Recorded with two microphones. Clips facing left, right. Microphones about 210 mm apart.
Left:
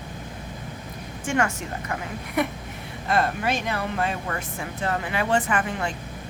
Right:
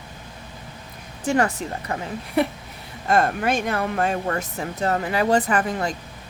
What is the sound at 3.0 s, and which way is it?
Speech, 45° right (ahead or behind).